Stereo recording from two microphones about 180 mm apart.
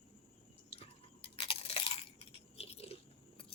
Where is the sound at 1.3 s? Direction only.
30° left (ahead or behind).